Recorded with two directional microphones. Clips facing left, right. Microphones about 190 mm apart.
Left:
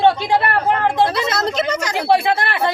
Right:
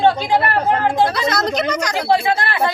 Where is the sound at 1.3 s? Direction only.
25° left (ahead or behind).